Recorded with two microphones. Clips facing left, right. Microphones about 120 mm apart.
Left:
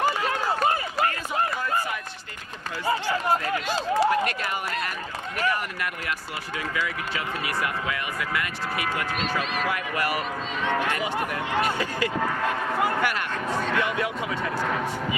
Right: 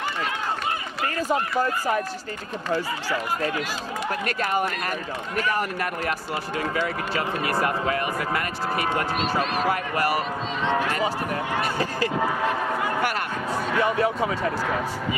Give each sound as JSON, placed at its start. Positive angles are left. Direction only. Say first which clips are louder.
{"t": 1.3, "sound": "speech", "louder": "right 3 dB", "side_deg": -40}
{"t": 4.3, "sound": "speech", "louder": "right 5 dB", "side_deg": -40}
{"t": 13.5, "sound": "speech", "louder": "right 1 dB", "side_deg": -5}
{"t": 13.8, "sound": "speech", "louder": "right 5 dB", "side_deg": -35}